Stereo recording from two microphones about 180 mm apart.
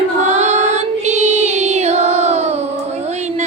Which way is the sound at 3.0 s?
40° right (ahead or behind).